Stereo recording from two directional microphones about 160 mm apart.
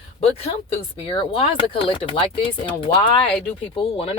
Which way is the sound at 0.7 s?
35° left (ahead or behind).